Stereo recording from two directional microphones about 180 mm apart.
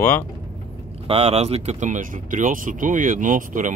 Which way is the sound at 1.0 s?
35° right (ahead or behind).